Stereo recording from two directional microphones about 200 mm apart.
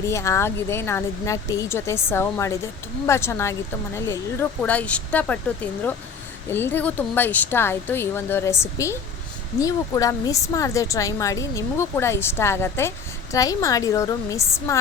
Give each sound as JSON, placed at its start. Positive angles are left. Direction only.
{"t": 0.1, "sound": "a woman's voice", "side_deg": 15}
{"t": 6.5, "sound": "a woman's voice", "side_deg": 10}